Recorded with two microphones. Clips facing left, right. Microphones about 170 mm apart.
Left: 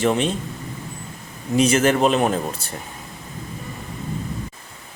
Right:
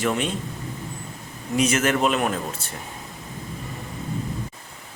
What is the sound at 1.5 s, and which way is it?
A man's voice, 30° left (ahead or behind).